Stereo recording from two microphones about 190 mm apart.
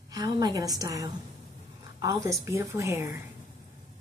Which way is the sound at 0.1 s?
20° right (ahead or behind).